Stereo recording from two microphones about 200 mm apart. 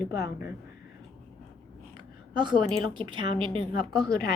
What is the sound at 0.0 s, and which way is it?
Speech, 20° right (ahead or behind).